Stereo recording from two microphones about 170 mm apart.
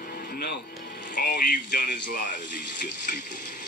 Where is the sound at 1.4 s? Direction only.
55° left (ahead or behind).